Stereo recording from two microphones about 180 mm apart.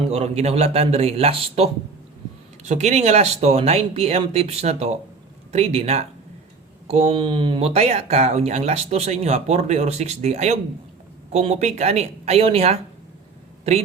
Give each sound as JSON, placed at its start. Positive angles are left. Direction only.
{"t": 0.0, "sound": "speech", "side_deg": -35}